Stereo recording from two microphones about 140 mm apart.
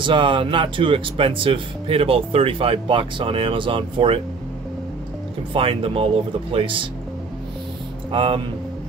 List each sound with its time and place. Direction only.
0.0 s speech: 35° right (ahead or behind)
5.5 s speech: 40° right (ahead or behind)
8.1 s speech: 40° right (ahead or behind)